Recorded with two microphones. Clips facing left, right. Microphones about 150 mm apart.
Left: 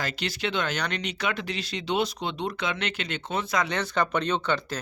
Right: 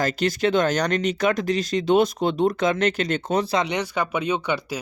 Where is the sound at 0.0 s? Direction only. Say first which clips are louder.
Right 9 dB; 45° right (ahead or behind).